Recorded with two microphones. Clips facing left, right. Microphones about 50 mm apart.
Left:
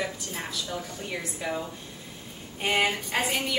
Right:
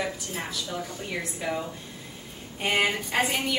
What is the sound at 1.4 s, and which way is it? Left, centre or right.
Speech, centre.